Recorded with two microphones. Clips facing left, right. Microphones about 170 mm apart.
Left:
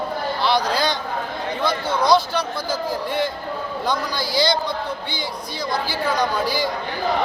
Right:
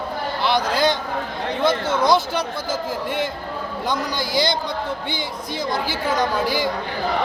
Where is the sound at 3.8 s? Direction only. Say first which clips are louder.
Even; 20° right (ahead or behind).